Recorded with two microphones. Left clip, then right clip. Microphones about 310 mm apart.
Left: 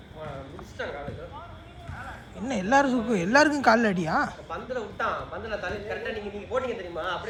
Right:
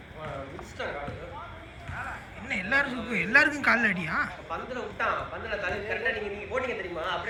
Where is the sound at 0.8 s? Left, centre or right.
Left.